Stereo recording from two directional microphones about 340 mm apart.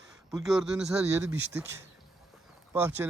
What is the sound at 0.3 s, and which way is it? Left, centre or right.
Speech, centre.